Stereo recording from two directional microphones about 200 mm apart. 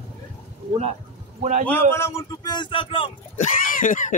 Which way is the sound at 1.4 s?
35° right (ahead or behind).